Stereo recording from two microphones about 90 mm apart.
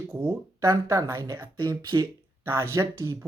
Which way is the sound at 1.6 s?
50° right (ahead or behind).